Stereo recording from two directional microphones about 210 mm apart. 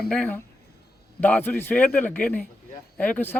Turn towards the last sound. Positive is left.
turn(degrees=10)  # may be behind; listen again after turning